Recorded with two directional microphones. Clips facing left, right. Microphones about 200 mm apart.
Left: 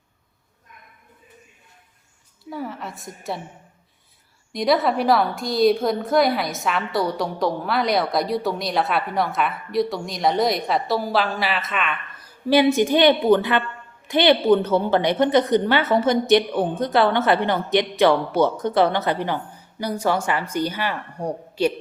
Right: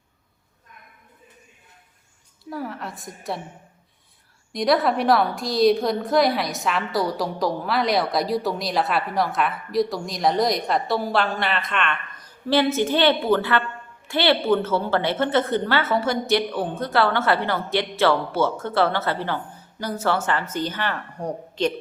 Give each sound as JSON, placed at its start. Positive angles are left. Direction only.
{"t": 2.4, "sound": "a woman's voice", "side_deg": 0}
{"t": 4.5, "sound": "a woman's voice", "side_deg": 0}